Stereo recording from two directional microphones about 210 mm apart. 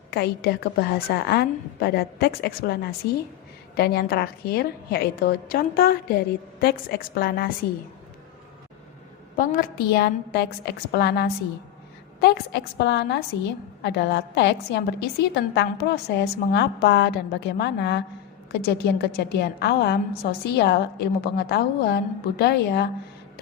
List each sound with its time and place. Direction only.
0.1 s a woman's voice: 50° left (ahead or behind)
9.3 s a woman's voice: 40° left (ahead or behind)